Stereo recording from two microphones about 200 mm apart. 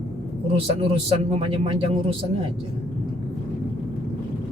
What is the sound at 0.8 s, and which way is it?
A man's voice, 25° right (ahead or behind).